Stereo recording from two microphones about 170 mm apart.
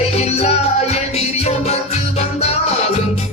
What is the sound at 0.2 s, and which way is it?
Music, 40° left (ahead or behind).